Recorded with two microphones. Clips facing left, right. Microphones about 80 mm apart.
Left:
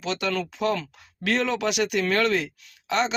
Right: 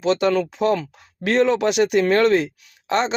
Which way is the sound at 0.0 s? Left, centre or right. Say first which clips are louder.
Right 9 dB; right.